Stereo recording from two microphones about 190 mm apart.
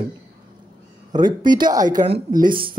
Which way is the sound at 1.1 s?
25° right (ahead or behind).